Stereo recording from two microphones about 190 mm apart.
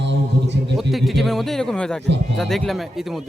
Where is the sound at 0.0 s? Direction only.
65° right (ahead or behind).